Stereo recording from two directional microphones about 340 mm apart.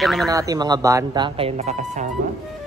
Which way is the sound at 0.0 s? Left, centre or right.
Centre.